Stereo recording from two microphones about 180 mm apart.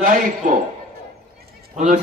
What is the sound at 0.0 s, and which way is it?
Speech, 45° right (ahead or behind).